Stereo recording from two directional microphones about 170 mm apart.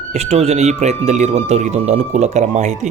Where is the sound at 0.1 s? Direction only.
40° right (ahead or behind).